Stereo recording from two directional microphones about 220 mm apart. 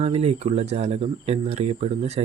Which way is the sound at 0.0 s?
30° right (ahead or behind).